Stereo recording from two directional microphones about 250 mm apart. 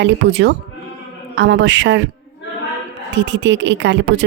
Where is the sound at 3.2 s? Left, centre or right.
Right.